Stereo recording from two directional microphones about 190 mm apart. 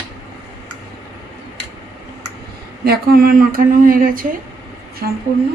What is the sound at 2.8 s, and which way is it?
Speech, 55° right (ahead or behind).